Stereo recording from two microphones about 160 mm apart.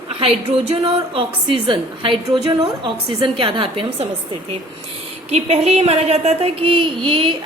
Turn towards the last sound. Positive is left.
turn(degrees=-30)  # may be behind; listen again after turning